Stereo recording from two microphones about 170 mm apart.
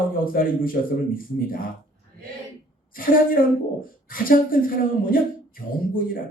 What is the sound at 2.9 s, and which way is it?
Speech, 55° left (ahead or behind).